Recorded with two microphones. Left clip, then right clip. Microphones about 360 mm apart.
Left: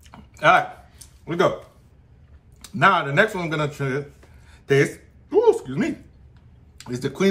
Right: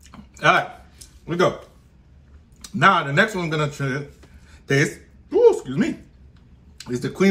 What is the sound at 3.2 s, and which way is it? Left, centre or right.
Speech, left.